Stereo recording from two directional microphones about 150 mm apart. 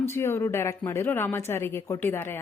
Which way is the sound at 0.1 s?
15° left (ahead or behind).